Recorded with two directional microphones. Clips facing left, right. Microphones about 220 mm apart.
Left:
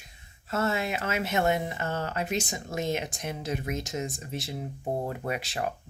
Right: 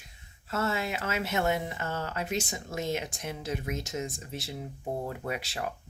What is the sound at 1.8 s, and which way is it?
Speech, 50° left (ahead or behind).